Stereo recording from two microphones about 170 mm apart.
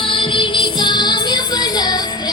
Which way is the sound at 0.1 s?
30° left (ahead or behind).